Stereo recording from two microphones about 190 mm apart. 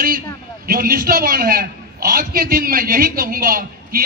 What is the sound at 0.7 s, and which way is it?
A man's voice, 50° right (ahead or behind).